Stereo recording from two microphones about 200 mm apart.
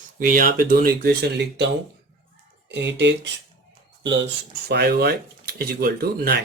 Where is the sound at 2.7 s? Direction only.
60° right (ahead or behind).